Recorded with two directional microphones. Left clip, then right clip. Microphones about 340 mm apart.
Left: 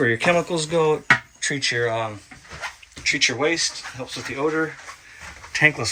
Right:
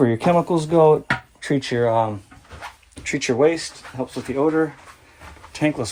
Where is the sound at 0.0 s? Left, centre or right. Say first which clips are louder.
Right 1 dB; centre.